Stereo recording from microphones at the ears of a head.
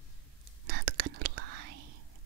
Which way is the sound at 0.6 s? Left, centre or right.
Right.